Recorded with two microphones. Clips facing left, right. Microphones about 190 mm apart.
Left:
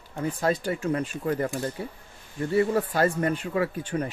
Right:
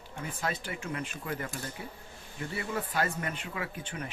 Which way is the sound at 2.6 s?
40° left (ahead or behind).